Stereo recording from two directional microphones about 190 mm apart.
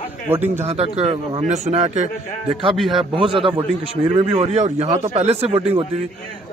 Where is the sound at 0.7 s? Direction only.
30° right (ahead or behind).